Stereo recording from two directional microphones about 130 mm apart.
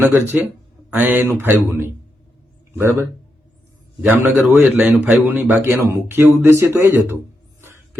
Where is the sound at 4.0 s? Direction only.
15° right (ahead or behind).